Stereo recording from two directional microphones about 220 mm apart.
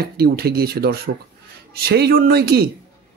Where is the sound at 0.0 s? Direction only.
45° right (ahead or behind).